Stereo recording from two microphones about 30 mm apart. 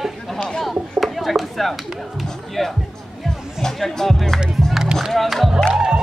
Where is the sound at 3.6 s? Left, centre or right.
Centre.